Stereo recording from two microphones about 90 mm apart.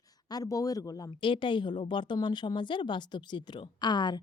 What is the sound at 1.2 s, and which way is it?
A woman's voice, 65° left (ahead or behind).